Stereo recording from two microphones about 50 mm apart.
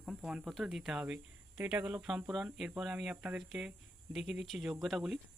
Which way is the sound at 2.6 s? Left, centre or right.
Centre.